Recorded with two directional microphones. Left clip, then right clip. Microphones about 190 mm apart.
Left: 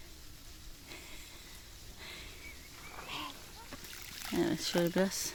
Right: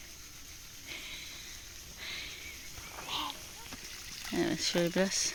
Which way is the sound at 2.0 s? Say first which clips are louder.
Right 7 dB; 5° left (ahead or behind).